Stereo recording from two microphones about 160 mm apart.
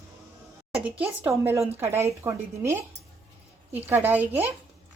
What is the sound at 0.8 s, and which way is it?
Speech, 10° right (ahead or behind).